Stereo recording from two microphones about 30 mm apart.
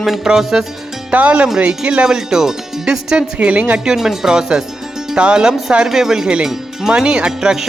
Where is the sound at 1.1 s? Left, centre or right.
Right.